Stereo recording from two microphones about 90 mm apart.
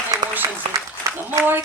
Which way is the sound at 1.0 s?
40° right (ahead or behind).